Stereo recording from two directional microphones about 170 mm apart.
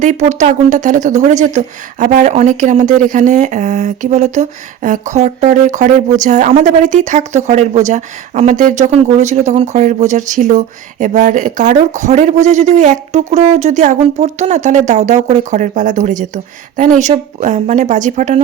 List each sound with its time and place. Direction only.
0.0 s speech: 45° right (ahead or behind)